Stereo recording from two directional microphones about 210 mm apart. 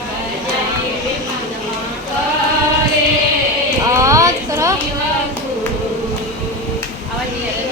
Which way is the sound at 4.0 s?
15° right (ahead or behind).